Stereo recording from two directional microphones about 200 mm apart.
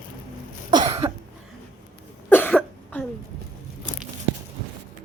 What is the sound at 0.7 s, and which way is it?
Cough, 25° right (ahead or behind).